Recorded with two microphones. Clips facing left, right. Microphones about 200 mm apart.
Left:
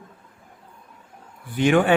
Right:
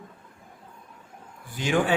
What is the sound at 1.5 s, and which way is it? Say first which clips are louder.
Speech: left 6 dB; 60° left (ahead or behind).